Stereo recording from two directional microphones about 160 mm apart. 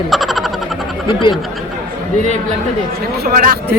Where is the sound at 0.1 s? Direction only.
Centre (ahead or behind).